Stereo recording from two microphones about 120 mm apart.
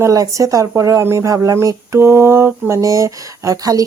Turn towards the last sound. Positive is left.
turn(degrees=-30)  # may be behind; listen again after turning